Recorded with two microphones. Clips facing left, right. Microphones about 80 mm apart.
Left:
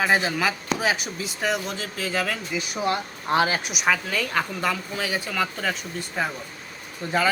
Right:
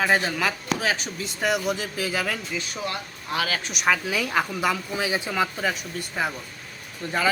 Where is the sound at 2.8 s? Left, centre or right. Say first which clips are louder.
Left 6 dB; left.